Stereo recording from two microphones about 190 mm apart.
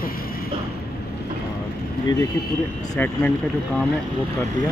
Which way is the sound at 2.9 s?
10° left (ahead or behind).